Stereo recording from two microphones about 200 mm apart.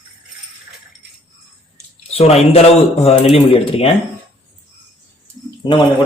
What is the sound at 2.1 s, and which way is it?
A man's voice, 30° left (ahead or behind).